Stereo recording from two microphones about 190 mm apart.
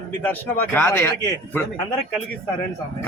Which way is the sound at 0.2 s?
10° left (ahead or behind).